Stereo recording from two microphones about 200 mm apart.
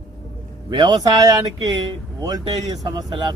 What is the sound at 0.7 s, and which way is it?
A man's voice, 20° right (ahead or behind).